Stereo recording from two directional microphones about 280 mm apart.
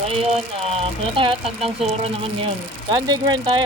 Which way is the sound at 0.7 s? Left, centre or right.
Centre.